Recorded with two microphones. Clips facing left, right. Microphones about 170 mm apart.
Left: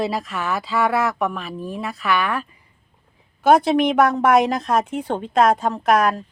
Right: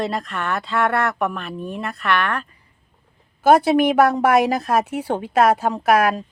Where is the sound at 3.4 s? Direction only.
5° right (ahead or behind).